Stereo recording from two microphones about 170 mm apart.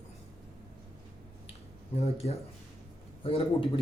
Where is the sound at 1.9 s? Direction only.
40° left (ahead or behind).